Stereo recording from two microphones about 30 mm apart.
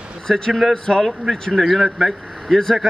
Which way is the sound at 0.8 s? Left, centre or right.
Centre.